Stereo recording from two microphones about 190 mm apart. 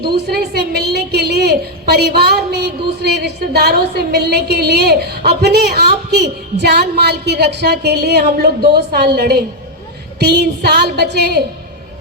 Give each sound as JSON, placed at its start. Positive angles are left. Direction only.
{"t": 0.3, "sound": "a woman's voice", "side_deg": -55}